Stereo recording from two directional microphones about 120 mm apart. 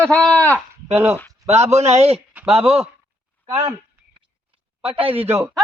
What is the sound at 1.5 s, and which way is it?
A man's voice, 65° right (ahead or behind).